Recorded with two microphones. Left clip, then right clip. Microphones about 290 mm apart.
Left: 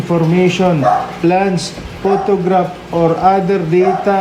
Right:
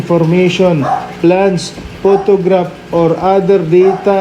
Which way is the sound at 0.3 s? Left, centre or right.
Centre.